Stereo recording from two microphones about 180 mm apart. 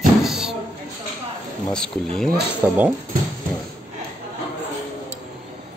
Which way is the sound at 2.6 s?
5° right (ahead or behind).